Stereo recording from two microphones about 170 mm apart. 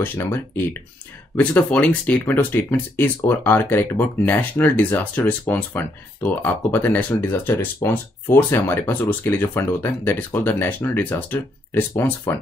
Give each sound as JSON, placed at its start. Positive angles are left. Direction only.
{"t": 0.0, "sound": "speech", "side_deg": 10}